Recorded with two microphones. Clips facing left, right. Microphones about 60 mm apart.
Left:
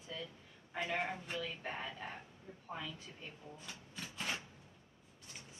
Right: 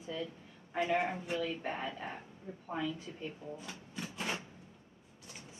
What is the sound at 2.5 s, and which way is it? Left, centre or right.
Speech, right.